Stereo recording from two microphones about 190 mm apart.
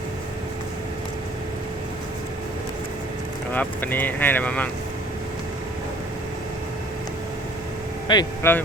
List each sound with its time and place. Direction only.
3.5 s speech: 10° left (ahead or behind)
8.0 s speech: 20° left (ahead or behind)